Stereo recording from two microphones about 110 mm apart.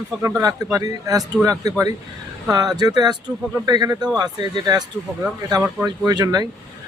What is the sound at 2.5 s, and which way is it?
Speech, 35° right (ahead or behind).